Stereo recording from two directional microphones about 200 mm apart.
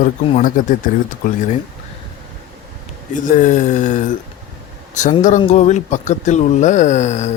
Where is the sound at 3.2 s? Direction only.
40° left (ahead or behind).